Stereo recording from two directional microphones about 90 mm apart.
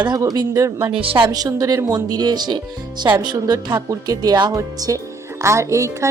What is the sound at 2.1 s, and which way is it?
Speech, 50° right (ahead or behind).